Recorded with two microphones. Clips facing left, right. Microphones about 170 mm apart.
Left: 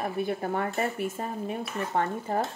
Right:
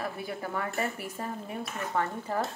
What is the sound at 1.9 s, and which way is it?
Speech, 50° left (ahead or behind).